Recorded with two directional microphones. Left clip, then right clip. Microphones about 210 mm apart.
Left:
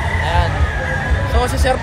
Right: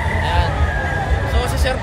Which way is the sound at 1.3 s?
25° left (ahead or behind).